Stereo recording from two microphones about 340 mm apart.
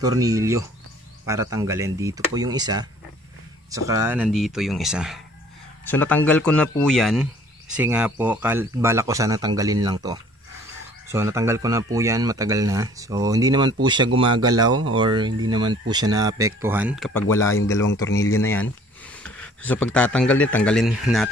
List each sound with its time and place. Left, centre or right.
0.0 s a man's voice: centre
14.7 s speech: right
15.0 s a man's voice: centre